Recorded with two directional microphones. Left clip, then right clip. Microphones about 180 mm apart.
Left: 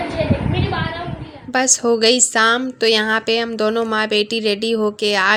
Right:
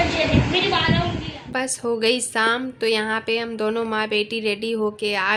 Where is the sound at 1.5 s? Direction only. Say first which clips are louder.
Left 8 dB; 30° left (ahead or behind).